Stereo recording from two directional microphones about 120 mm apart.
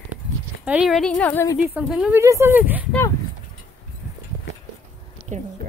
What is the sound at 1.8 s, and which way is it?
Speech, 10° right (ahead or behind).